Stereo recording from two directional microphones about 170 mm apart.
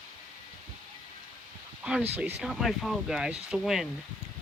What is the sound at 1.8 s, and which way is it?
Speech, 5° right (ahead or behind).